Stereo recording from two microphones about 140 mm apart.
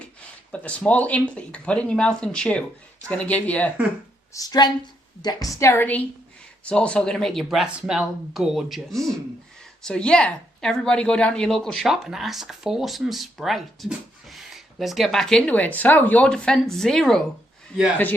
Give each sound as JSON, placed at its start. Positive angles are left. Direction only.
{"t": 0.0, "sound": "speech", "side_deg": 10}
{"t": 4.4, "sound": "a woman's voice", "side_deg": 30}